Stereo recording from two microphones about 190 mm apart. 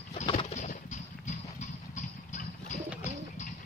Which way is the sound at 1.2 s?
40° left (ahead or behind).